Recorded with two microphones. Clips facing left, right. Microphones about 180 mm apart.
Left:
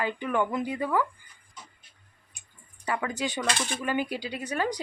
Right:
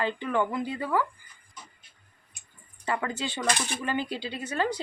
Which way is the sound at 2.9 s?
10° left (ahead or behind).